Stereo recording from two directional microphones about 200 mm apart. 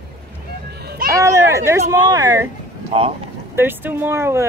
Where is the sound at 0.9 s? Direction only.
50° right (ahead or behind).